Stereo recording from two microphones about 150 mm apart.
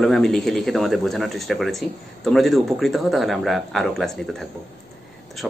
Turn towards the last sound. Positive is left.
turn(degrees=0)  # may be behind; listen again after turning